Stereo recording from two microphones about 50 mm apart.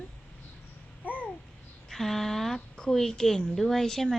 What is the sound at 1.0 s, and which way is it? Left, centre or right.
Babbling, left.